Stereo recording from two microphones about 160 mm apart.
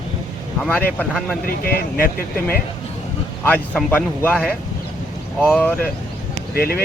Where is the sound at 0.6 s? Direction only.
5° left (ahead or behind).